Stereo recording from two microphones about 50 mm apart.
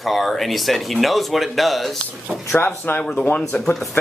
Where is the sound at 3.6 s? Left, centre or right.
Centre.